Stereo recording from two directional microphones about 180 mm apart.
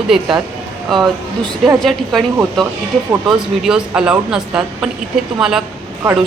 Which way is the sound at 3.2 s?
5° right (ahead or behind).